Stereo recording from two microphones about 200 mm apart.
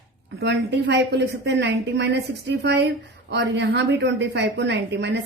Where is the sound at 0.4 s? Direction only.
60° right (ahead or behind).